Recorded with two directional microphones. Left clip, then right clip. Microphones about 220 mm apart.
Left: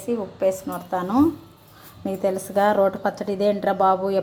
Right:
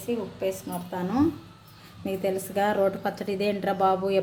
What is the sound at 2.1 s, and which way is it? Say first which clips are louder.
A woman's voice: left 4 dB; centre (ahead or behind).